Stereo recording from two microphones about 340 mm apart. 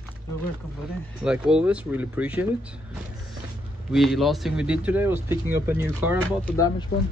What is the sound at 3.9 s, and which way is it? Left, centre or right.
Speech, centre.